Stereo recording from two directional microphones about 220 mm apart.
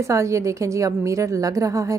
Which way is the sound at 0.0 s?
15° right (ahead or behind).